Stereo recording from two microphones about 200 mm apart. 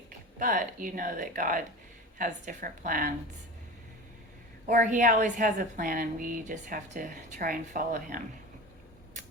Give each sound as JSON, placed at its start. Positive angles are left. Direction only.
{"t": 0.3, "sound": "a woman's voice", "side_deg": -40}
{"t": 4.7, "sound": "a woman's voice", "side_deg": -40}